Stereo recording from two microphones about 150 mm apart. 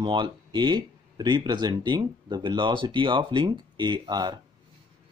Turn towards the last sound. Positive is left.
turn(degrees=-25)  # may be behind; listen again after turning